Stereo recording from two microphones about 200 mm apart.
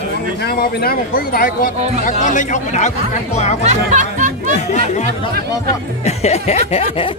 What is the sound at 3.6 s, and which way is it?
Speech, 35° right (ahead or behind).